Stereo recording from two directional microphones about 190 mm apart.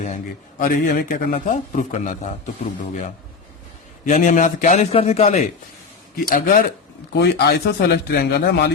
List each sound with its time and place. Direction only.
0.6 s a man's voice: 50° left (ahead or behind)
4.0 s a man's voice: 40° left (ahead or behind)
6.1 s a man's voice: 50° left (ahead or behind)